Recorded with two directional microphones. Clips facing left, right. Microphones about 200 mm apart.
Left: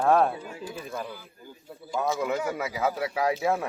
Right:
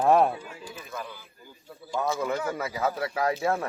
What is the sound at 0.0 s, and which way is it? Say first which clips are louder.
Speech: right 1 dB; 5° right (ahead or behind).